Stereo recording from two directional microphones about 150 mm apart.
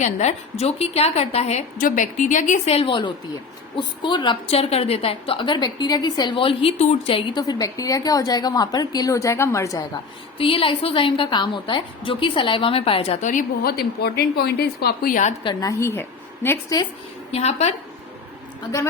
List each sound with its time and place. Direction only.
0.0 s a woman's voice: 50° left (ahead or behind)
1.8 s a woman's voice: 60° left (ahead or behind); by 7.3 s 40° left (ahead or behind)
7.3 s a woman's voice: 25° left (ahead or behind)
10.3 s a woman's voice: 35° left (ahead or behind)
13.2 s a woman's voice: 75° left (ahead or behind)
15.4 s a woman's voice: 20° left (ahead or behind)
17.3 s a woman's voice: 45° left (ahead or behind)